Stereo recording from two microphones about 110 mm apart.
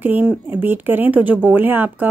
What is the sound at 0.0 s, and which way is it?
Speech, 15° right (ahead or behind).